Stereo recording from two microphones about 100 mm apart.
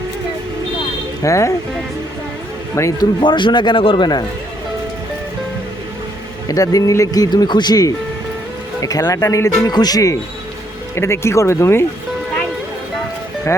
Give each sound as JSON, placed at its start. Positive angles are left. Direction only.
{"t": 1.2, "sound": "speech", "side_deg": 30}
{"t": 2.7, "sound": "speech", "side_deg": 30}
{"t": 3.2, "sound": "speech", "side_deg": 50}
{"t": 6.5, "sound": "speech", "side_deg": 35}
{"t": 13.5, "sound": "speech", "side_deg": 30}